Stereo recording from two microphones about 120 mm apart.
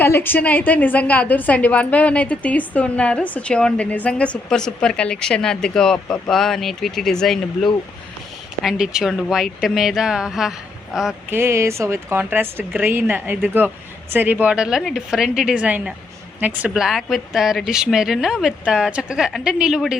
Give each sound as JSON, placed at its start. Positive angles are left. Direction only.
{"t": 0.0, "sound": "a woman's voice", "side_deg": 20}
{"t": 11.3, "sound": "a woman's voice", "side_deg": -20}